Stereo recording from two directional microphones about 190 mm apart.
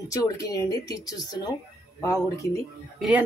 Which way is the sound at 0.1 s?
15° left (ahead or behind).